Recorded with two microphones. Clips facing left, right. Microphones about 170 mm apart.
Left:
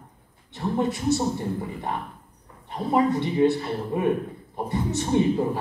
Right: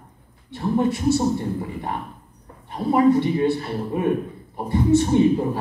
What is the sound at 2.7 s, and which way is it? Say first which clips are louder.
A man's voice: right 5 dB; 20° left (ahead or behind).